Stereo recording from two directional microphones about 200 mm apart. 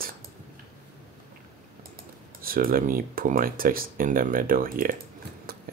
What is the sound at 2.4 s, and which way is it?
Speech, 45° right (ahead or behind).